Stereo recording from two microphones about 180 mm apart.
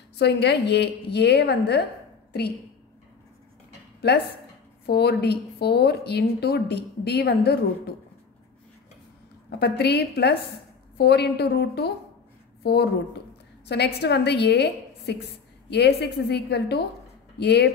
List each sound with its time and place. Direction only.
0.1 s a woman's voice: 70° left (ahead or behind)
4.8 s a woman's voice: 65° left (ahead or behind)
9.6 s a woman's voice: 65° left (ahead or behind)
13.7 s a woman's voice: 65° left (ahead or behind)